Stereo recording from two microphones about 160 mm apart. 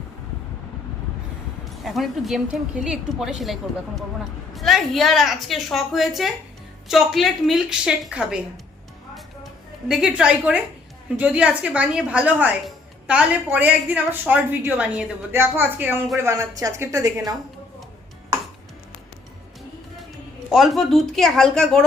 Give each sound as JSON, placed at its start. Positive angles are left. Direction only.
{"t": 1.6, "sound": "a woman's voice", "side_deg": 0}
{"t": 9.9, "sound": "a woman's voice", "side_deg": -5}
{"t": 20.5, "sound": "a woman's voice", "side_deg": 0}